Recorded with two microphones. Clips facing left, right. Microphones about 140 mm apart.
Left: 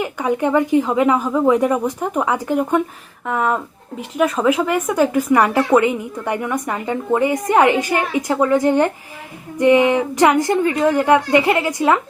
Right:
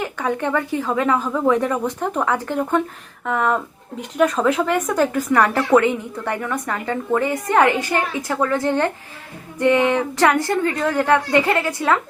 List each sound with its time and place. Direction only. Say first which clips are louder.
0.0 s speech: left 4 dB; 10° left (ahead or behind)